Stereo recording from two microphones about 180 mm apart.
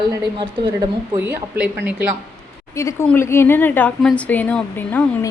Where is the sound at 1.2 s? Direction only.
10° right (ahead or behind).